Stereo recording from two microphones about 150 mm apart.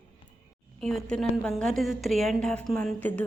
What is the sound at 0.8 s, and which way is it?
A woman's voice, centre (ahead or behind).